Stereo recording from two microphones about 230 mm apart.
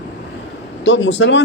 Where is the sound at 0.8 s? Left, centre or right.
Left.